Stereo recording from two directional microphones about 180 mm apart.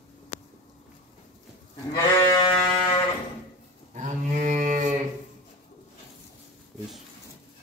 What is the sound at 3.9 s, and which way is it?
Livestock, 45° right (ahead or behind).